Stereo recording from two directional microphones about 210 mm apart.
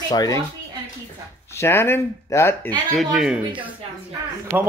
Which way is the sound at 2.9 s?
Centre (ahead or behind).